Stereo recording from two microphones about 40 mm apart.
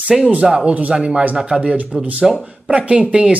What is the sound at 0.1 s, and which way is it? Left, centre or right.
Speech, centre.